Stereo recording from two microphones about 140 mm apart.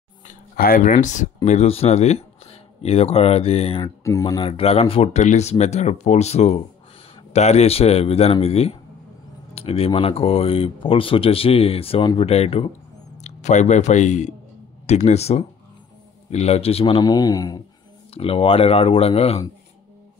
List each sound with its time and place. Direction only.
0.3 s speech: 80° left; by 3.8 s 45° left (ahead or behind)
3.8 s speech: 20° left (ahead or behind)
4.4 s speech: 45° left (ahead or behind)
13.2 s a man's voice: 55° left (ahead or behind); by 17.6 s 25° left (ahead or behind)
18.1 s speech: 45° left (ahead or behind)